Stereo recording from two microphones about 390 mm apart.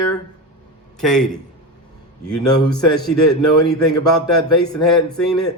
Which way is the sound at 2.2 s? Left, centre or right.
Centre.